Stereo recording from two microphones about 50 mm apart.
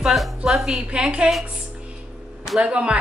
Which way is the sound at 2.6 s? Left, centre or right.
Right.